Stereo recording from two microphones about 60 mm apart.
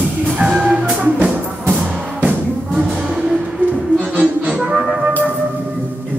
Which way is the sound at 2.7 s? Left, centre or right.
Centre.